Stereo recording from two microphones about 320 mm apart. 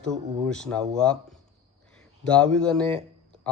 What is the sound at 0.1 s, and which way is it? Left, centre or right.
Speech, centre.